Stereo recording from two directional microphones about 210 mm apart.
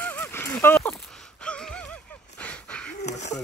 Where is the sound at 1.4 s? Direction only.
5° left (ahead or behind).